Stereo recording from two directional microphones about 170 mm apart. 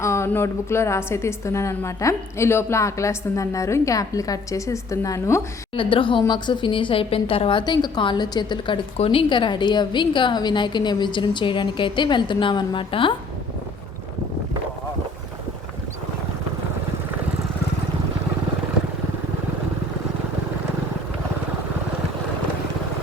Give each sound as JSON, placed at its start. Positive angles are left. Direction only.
{"t": 0.0, "sound": "a woman's voice", "side_deg": 15}
{"t": 5.7, "sound": "a woman's voice", "side_deg": 30}